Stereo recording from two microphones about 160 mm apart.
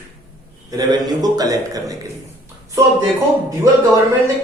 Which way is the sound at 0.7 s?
25° right (ahead or behind).